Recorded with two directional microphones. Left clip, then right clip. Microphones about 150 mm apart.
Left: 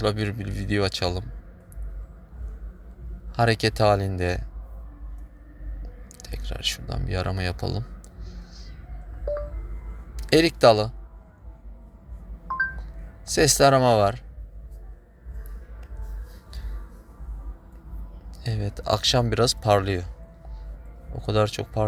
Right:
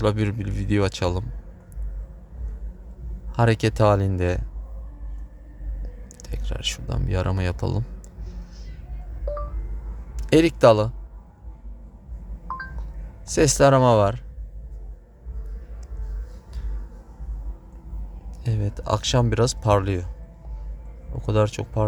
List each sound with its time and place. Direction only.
0.0 s speech: 35° right (ahead or behind)
3.3 s speech: 30° right (ahead or behind)
6.1 s a sound: 35° right (ahead or behind)
10.2 s speech: 30° right (ahead or behind)
13.2 s speech: 30° right (ahead or behind)
18.4 s speech: 25° right (ahead or behind)
21.1 s speech: 25° right (ahead or behind)